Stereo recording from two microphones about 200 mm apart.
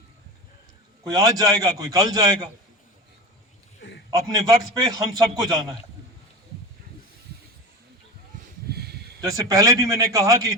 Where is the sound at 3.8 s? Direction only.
60° left (ahead or behind).